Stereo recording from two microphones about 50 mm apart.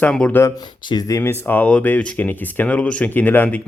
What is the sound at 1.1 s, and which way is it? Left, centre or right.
Speech, left.